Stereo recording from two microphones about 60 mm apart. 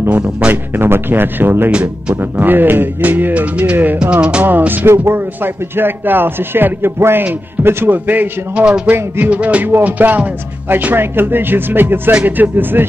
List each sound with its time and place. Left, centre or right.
0.5 s speech: right
1.7 s speech: centre
2.1 s speech: right
4.0 s speech: centre
4.5 s speech: right
8.6 s speech: centre
9.2 s music: right
9.8 s speech: right